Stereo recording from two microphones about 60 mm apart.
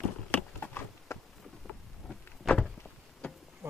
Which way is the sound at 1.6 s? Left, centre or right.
Centre.